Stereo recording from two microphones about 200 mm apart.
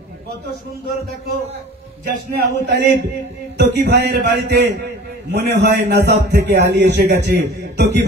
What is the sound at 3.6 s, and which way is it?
A man's voice, 55° right (ahead or behind).